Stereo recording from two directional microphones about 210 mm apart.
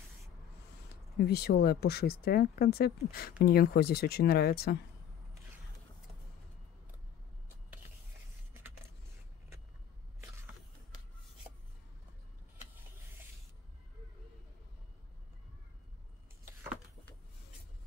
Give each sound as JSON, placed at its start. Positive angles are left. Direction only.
{"t": 1.1, "sound": "speech", "side_deg": 50}